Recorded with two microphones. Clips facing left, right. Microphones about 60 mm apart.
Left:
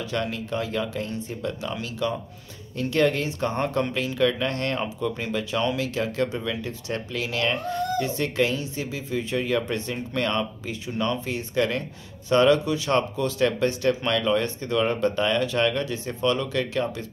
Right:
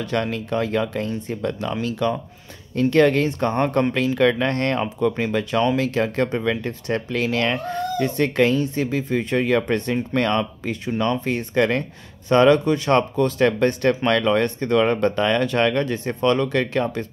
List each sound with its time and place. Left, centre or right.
0.1 s speech: right